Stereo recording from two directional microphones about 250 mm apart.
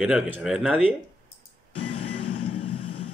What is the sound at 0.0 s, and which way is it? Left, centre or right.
Speech, centre.